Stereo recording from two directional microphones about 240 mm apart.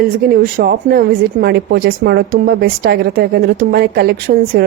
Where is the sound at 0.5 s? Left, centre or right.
Right.